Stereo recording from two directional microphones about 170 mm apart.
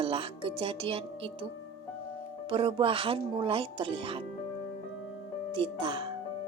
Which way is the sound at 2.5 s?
30° right (ahead or behind).